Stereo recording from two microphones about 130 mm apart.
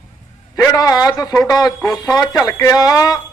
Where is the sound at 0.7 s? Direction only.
30° left (ahead or behind).